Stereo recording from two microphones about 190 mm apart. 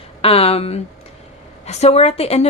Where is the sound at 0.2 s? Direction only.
30° left (ahead or behind).